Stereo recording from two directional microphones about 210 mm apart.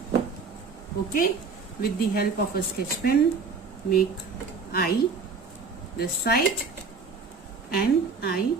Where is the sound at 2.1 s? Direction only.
45° left (ahead or behind).